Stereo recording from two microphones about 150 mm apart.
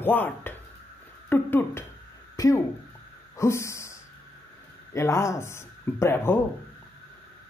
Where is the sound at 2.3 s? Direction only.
20° left (ahead or behind).